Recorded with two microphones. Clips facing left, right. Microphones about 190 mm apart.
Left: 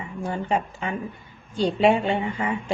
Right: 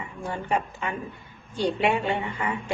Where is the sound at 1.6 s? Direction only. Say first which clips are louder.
Left 4 dB; 25° left (ahead or behind).